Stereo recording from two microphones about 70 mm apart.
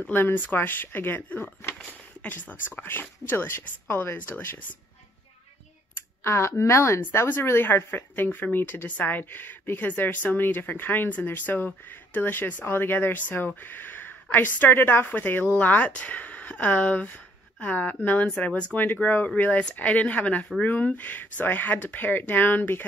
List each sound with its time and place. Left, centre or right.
0.1 s speech: left
6.2 s speech: left
7.0 s speech: left